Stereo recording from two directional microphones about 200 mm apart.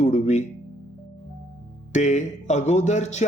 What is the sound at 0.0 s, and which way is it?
Music, 35° left (ahead or behind).